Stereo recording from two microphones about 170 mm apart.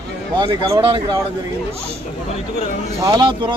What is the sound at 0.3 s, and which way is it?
Speech, 25° right (ahead or behind).